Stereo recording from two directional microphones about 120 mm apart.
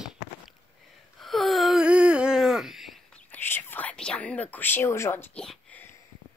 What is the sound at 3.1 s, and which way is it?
Whispering, 15° left (ahead or behind).